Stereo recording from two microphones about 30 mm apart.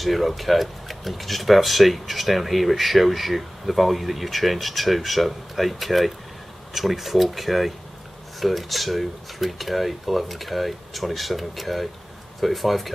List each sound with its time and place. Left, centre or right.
0.0 s speech: centre